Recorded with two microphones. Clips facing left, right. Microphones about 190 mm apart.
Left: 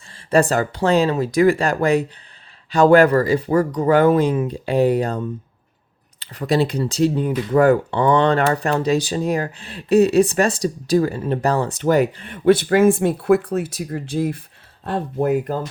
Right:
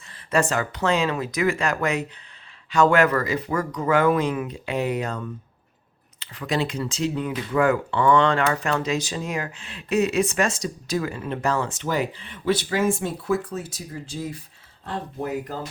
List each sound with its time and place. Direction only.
0.1 s speech: 35° left (ahead or behind)
11.9 s speech: 50° left (ahead or behind)